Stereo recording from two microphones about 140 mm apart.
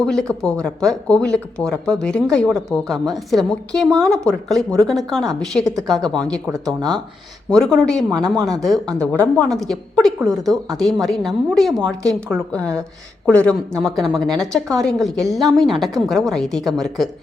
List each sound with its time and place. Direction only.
0.0 s a woman's voice: 5° left (ahead or behind)